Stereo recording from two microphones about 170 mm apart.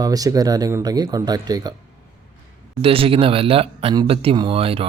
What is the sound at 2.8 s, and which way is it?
Speech, 35° right (ahead or behind).